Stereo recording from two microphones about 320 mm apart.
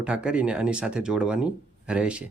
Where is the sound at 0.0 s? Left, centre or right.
Centre.